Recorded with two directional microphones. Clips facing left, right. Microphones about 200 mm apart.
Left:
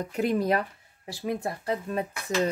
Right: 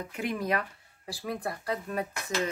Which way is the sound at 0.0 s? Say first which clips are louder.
Left 7 dB; 35° left (ahead or behind).